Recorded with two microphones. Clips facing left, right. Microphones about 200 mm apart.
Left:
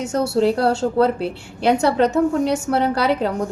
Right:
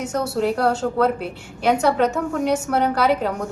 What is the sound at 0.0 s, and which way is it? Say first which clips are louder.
A woman's voice: left 4 dB; 30° left (ahead or behind).